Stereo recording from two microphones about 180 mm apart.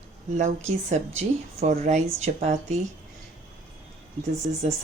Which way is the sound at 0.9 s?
35° right (ahead or behind).